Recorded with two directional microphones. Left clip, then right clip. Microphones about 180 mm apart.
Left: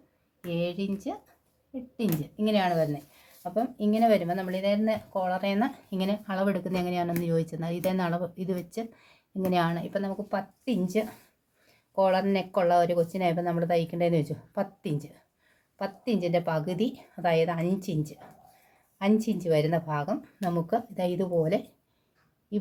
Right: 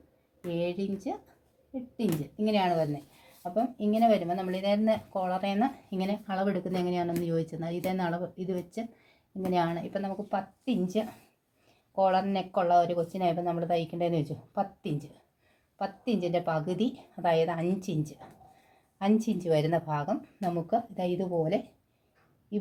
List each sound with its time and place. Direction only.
0.4 s speech: 5° left (ahead or behind)
20.4 s speech: 15° left (ahead or behind)